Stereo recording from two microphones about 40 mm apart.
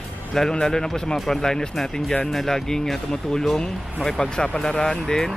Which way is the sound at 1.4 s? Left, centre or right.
Centre.